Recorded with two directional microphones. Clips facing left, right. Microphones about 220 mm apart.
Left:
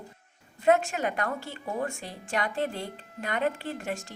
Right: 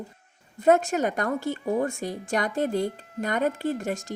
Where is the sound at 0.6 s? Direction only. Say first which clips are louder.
Right 3 dB; 45° right (ahead or behind).